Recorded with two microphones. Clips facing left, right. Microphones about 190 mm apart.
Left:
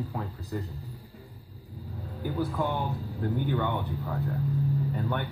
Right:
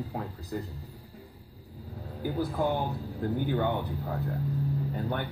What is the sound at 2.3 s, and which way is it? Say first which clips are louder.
Speech: right 1 dB; 40° right (ahead or behind).